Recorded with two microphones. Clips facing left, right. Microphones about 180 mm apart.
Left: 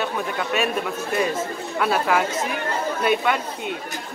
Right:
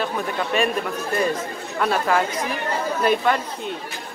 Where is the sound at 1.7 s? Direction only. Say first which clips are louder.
Even; 5° left (ahead or behind).